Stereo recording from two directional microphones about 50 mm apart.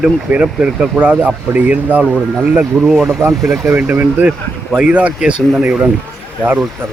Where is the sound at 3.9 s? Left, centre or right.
Right.